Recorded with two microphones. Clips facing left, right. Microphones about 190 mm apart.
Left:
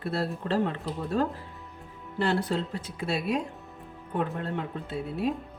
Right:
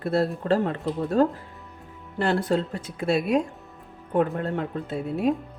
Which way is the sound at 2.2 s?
50° right (ahead or behind).